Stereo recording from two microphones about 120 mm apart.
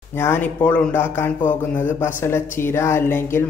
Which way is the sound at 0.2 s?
15° left (ahead or behind).